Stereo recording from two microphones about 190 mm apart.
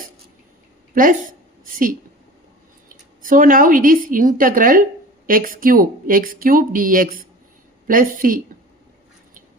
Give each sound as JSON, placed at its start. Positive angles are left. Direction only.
{"t": 0.9, "sound": "a woman's voice", "side_deg": -45}